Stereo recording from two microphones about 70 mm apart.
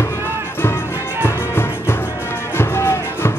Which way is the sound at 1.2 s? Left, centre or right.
Left.